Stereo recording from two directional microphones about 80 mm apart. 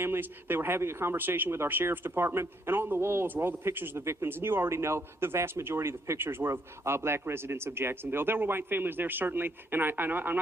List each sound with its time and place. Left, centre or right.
0.0 s speech: right